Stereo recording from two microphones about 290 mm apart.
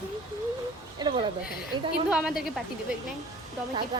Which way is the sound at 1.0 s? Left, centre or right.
Centre.